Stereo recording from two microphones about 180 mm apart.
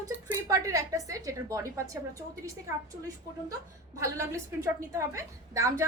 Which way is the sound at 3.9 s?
15° right (ahead or behind).